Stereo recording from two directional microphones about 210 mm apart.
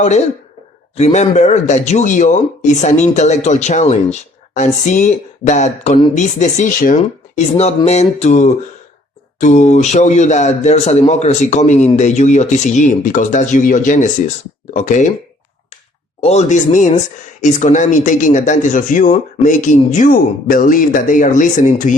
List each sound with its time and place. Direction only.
0.9 s speech: 30° left (ahead or behind)
16.2 s speech: 30° left (ahead or behind)